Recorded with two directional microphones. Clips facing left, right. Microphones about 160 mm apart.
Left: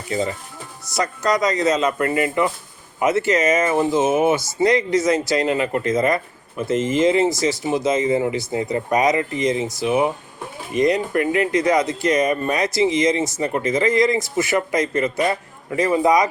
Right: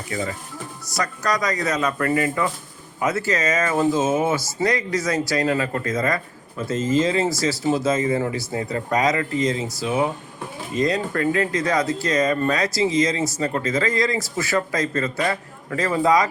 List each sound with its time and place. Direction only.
0.1 s speech: 25° left (ahead or behind)